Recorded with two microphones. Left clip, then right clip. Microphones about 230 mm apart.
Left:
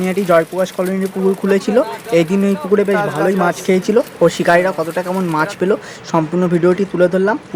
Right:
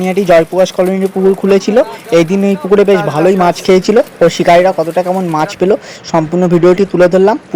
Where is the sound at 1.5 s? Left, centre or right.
Centre.